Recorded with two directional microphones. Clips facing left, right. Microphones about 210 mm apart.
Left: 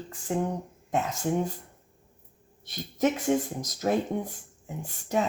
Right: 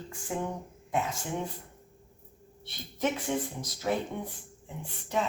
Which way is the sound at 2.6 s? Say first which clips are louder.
Left 5 dB; 45° left (ahead or behind).